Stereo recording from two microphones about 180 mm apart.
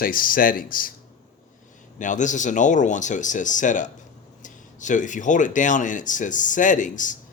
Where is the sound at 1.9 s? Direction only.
45° left (ahead or behind).